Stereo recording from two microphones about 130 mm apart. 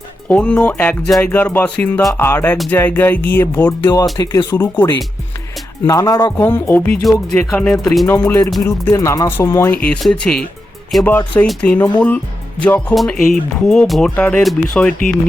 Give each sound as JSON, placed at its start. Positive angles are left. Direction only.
{"t": 0.3, "sound": "speech", "side_deg": 10}
{"t": 4.2, "sound": "speech", "side_deg": 30}
{"t": 4.5, "sound": "speech", "side_deg": 15}
{"t": 6.4, "sound": "speech", "side_deg": 15}
{"t": 7.0, "sound": "speech", "side_deg": 0}
{"t": 8.0, "sound": "speech", "side_deg": 20}